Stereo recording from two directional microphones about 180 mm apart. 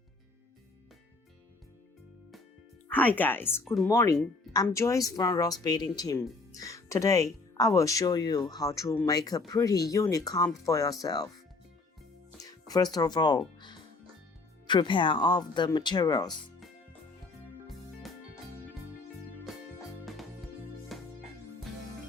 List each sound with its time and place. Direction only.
2.9 s a woman's voice: 10° left (ahead or behind)
12.4 s speech: 20° left (ahead or behind)
20.9 s music: centre (ahead or behind)